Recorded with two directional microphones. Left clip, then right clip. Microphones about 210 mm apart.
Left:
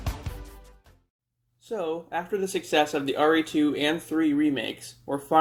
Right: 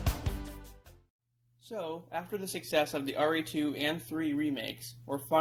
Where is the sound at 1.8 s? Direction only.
30° right (ahead or behind).